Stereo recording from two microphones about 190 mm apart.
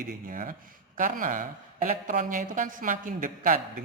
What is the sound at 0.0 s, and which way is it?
Speech, 45° right (ahead or behind).